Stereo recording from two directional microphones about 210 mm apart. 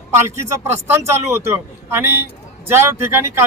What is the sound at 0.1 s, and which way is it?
A man's voice, 15° right (ahead or behind).